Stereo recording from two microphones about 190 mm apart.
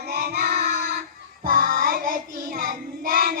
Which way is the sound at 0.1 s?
55° right (ahead or behind).